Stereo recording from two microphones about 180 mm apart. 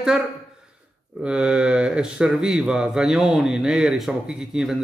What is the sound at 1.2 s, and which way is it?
Speech, 5° right (ahead or behind).